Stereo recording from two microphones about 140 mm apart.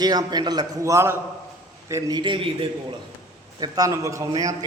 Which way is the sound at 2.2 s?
35° right (ahead or behind).